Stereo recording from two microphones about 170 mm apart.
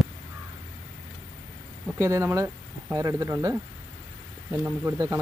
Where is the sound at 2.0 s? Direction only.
15° right (ahead or behind).